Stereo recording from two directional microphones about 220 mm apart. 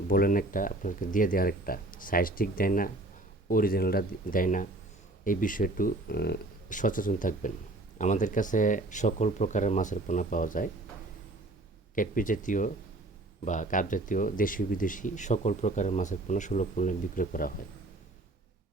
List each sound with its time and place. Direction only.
0.1 s speech: 40° left (ahead or behind)
11.9 s speech: 40° left (ahead or behind)